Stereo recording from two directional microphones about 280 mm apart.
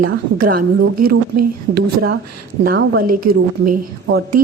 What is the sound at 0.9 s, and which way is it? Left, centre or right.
Speech, right.